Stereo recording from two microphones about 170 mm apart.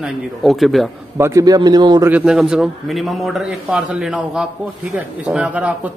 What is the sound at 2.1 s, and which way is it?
A man's voice, 5° right (ahead or behind).